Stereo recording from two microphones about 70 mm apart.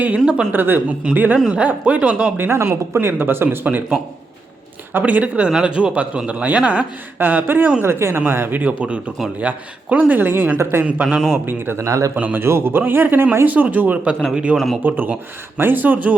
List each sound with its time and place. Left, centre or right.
0.2 s speech: centre
0.5 s speech: right
2.4 s speech: right
4.9 s speech: right
7.2 s speech: right
11.0 s speech: centre
11.4 s speech: right
11.9 s a man's voice: right
12.1 s speech: right
12.4 s speech: right; by 14.6 s centre
14.8 s speech: right